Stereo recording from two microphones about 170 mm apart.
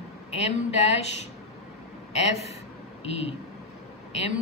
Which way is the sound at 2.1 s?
40° left (ahead or behind).